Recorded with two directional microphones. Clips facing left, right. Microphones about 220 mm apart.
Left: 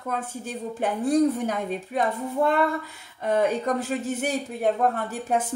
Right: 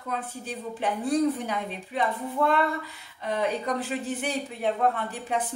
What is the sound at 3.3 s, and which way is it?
Speech, 45° left (ahead or behind).